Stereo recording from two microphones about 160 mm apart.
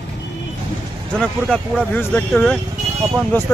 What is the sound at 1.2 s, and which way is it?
Speech, 5° left (ahead or behind).